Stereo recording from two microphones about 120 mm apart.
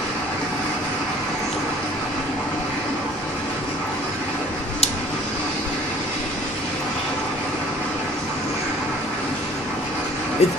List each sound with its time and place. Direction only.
10.4 s speech: 65° left (ahead or behind)